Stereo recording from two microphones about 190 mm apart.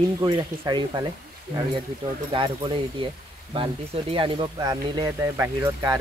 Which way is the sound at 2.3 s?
25° right (ahead or behind).